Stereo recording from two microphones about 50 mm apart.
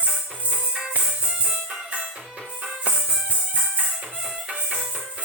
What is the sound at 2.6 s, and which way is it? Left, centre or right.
Music, centre.